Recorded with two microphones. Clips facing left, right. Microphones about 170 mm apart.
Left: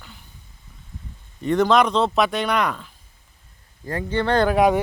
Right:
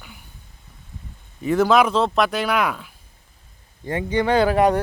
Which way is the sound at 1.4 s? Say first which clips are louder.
Right 1 dB; 5° right (ahead or behind).